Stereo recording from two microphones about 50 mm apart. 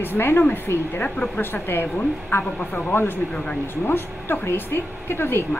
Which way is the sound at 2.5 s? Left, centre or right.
Left.